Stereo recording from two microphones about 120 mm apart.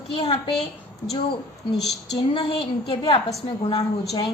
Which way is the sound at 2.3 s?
50° left (ahead or behind).